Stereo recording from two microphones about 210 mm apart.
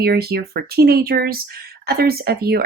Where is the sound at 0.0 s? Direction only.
50° right (ahead or behind).